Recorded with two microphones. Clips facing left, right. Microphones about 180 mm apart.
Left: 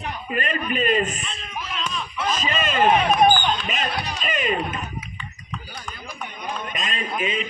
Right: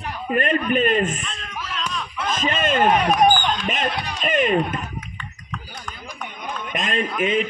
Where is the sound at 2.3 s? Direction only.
50° right (ahead or behind).